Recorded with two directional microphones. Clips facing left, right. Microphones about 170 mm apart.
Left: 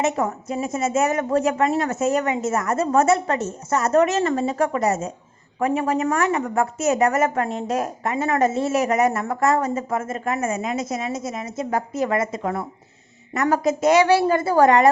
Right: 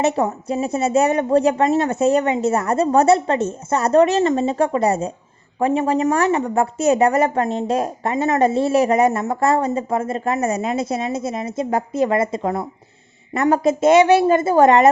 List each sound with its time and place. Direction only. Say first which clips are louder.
0.3 s a woman's voice: right 4 dB; 30° right (ahead or behind)